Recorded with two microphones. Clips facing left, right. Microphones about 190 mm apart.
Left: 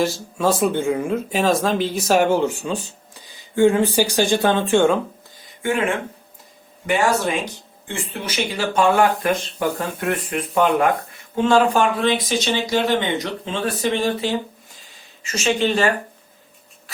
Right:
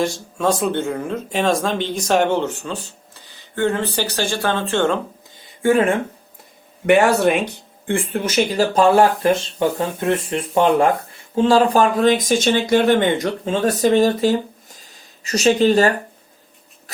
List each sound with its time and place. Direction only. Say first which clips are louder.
0.0 s speech: even; 5° left (ahead or behind)
5.4 s a sound: right 6 dB; 35° right (ahead or behind)
6.8 s speech: right 6 dB; 60° right (ahead or behind); by 15.9 s 40° right (ahead or behind)